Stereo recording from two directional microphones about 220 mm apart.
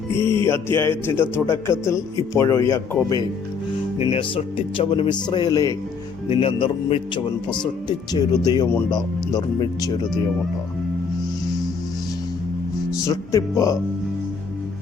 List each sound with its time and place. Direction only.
0.2 s music: 20° right (ahead or behind)
0.4 s speech: 10° left (ahead or behind)
3.9 s speech: 25° left (ahead or behind)
12.9 s speech: 15° left (ahead or behind)